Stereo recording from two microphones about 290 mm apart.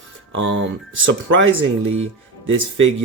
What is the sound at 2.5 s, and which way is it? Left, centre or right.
Speech, right.